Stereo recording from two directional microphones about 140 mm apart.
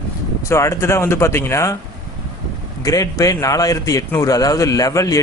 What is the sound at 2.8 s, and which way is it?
A man's voice, 25° left (ahead or behind).